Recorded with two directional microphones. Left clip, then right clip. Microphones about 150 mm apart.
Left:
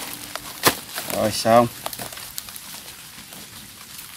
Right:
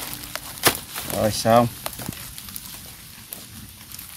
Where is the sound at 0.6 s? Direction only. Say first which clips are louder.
Left 1 dB; 15° right (ahead or behind).